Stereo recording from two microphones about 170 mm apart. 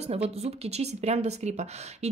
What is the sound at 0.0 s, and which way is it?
Speech, 40° right (ahead or behind).